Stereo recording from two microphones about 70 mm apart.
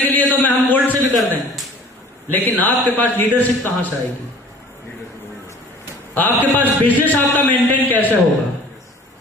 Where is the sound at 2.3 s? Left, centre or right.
Left.